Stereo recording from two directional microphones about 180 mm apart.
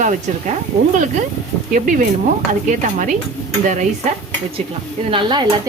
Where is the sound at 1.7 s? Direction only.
45° right (ahead or behind).